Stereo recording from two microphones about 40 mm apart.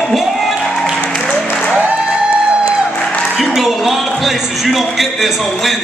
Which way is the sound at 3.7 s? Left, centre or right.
Centre.